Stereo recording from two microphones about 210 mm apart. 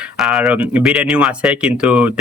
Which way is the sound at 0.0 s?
Centre (ahead or behind).